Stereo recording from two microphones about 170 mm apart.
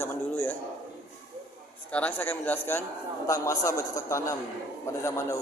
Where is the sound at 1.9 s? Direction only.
10° left (ahead or behind).